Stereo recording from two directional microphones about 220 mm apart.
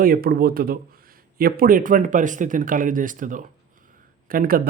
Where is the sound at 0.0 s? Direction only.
40° right (ahead or behind).